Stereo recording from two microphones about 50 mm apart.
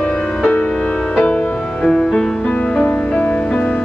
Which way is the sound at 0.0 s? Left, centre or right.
Centre.